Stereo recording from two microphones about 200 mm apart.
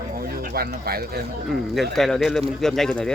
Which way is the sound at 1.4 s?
Centre (ahead or behind).